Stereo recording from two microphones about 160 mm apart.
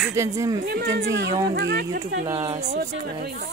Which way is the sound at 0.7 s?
80° right.